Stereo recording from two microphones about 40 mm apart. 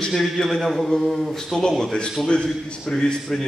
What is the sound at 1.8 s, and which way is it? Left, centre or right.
A man's voice, centre.